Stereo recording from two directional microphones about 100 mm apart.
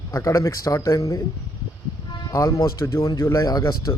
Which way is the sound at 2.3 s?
35° left (ahead or behind).